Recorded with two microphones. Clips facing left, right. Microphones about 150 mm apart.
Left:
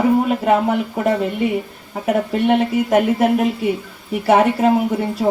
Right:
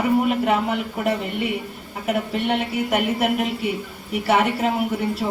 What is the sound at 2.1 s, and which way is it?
Speech, 40° left (ahead or behind).